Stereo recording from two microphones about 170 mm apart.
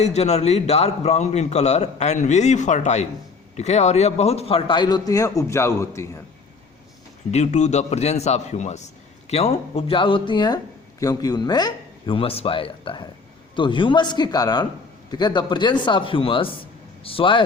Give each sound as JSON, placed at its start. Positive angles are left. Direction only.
{"t": 0.0, "sound": "a man's voice", "side_deg": 40}
{"t": 7.3, "sound": "a man's voice", "side_deg": 40}